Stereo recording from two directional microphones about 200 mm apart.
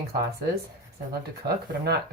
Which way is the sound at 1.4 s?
55° right (ahead or behind).